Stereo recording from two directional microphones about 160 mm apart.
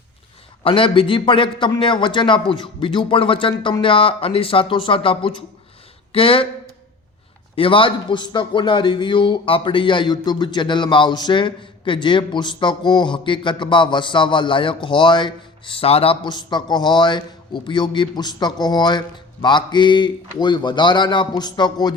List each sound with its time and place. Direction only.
0.6 s a man's voice: 35° left (ahead or behind)
7.5 s a man's voice: 35° left (ahead or behind)